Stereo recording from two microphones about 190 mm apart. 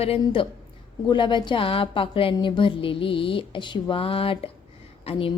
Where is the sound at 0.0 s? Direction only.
30° left (ahead or behind).